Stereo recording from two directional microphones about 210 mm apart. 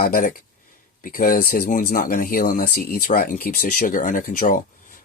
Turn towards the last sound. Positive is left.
turn(degrees=40)  # may be behind; listen again after turning